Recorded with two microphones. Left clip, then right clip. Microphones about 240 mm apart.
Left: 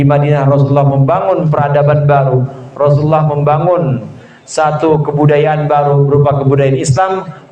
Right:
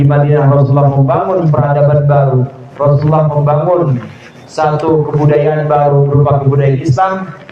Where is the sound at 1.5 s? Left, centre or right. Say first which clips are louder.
Right 1 dB; left.